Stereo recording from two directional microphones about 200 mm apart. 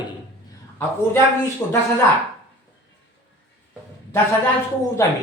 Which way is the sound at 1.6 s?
10° left (ahead or behind).